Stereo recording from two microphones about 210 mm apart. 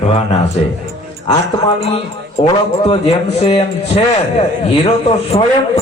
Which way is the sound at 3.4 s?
25° left (ahead or behind).